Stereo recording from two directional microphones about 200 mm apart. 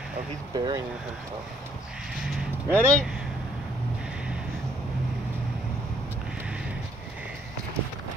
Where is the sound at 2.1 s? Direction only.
5° right (ahead or behind).